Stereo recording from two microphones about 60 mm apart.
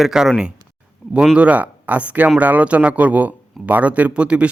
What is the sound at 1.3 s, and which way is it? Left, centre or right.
Speech, right.